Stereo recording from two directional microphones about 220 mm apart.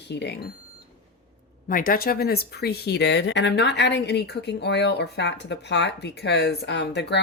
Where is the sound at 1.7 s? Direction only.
40° left (ahead or behind).